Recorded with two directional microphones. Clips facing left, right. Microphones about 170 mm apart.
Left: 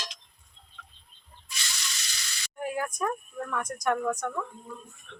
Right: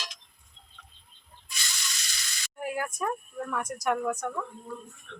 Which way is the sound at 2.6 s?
5° right (ahead or behind).